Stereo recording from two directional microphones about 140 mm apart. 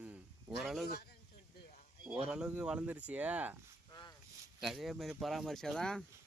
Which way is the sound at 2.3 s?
5° right (ahead or behind).